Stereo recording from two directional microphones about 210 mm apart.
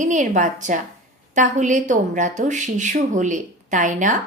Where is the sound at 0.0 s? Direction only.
35° right (ahead or behind).